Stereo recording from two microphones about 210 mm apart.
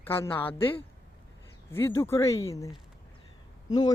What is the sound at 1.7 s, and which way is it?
Speech, 15° left (ahead or behind).